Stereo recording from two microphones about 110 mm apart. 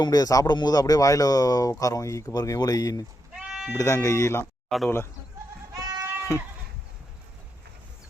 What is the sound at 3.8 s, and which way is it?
Speech, 25° left (ahead or behind).